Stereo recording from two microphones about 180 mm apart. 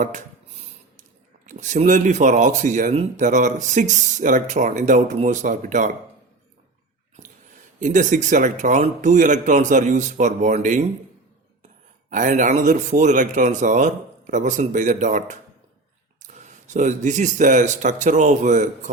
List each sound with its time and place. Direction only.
0.0 s a sound: 45° right (ahead or behind)
1.5 s speech: 45° right (ahead or behind)
7.8 s speech: 45° right (ahead or behind)
12.1 s speech: 45° right (ahead or behind)